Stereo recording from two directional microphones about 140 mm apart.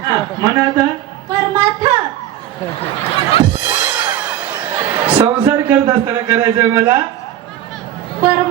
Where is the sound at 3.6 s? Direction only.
15° right (ahead or behind).